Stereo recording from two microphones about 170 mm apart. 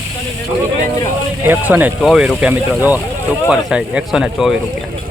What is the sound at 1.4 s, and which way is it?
Speech, 10° right (ahead or behind).